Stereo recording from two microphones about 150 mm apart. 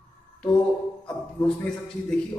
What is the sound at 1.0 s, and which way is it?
A man's voice, 5° left (ahead or behind).